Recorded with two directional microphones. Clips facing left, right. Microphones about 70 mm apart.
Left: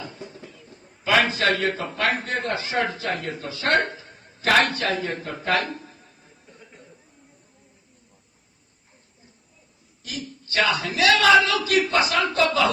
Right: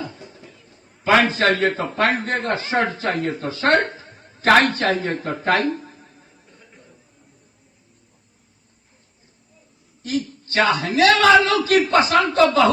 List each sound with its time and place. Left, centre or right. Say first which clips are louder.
1.0 s a man's voice: right 4 dB; right
5.7 s a sound: right 6 dB; right
10.0 s a man's voice: right 10 dB; right